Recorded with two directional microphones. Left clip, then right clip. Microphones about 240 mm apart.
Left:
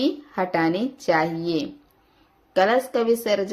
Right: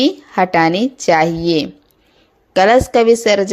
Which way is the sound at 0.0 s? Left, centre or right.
Right.